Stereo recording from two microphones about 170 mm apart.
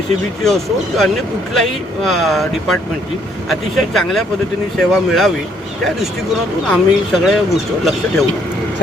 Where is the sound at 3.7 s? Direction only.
Centre (ahead or behind).